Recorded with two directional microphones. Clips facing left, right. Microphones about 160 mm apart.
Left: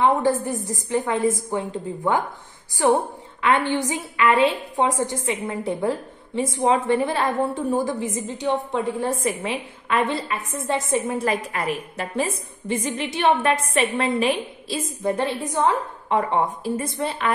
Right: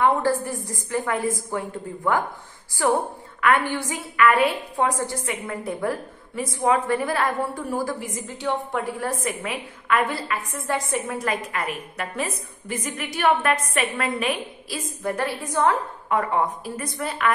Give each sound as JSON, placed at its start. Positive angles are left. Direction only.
{"t": 0.0, "sound": "a woman's voice", "side_deg": 20}